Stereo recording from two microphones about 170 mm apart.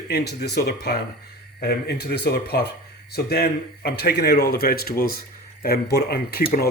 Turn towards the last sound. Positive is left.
turn(degrees=60)  # may be behind; listen again after turning